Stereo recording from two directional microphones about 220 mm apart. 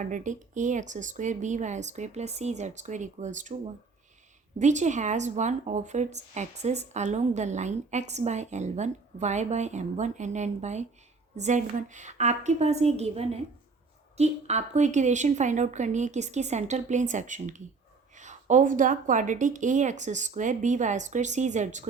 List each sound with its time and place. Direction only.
0.0 s speech: 35° right (ahead or behind)
4.5 s speech: 35° right (ahead or behind)